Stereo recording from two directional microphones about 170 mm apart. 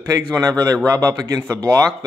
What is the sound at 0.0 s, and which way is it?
Speech, 20° right (ahead or behind).